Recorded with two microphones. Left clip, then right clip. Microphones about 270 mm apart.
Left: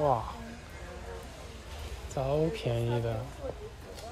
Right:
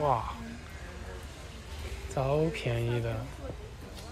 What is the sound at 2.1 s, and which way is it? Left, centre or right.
Speech, centre.